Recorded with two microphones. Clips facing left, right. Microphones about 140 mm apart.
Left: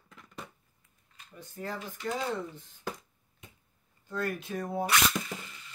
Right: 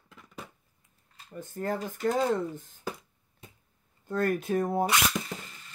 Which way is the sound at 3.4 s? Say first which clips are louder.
Right 2 dB; 35° right (ahead or behind).